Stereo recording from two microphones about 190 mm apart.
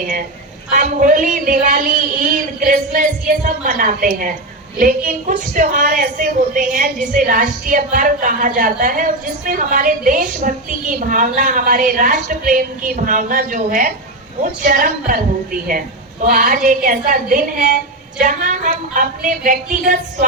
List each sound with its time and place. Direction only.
0.7 s speech: 45° right (ahead or behind)
16.2 s speech: 45° right (ahead or behind)